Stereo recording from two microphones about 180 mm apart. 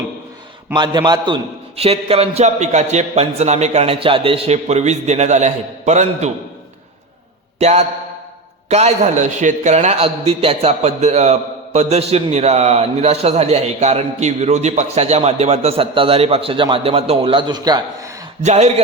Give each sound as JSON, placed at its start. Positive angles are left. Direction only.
{"t": 0.7, "sound": "a man's voice", "side_deg": -25}
{"t": 7.6, "sound": "a man's voice", "side_deg": -35}
{"t": 18.4, "sound": "a man's voice", "side_deg": -40}